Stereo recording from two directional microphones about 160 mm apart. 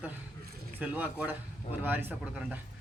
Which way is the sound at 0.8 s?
10° right (ahead or behind).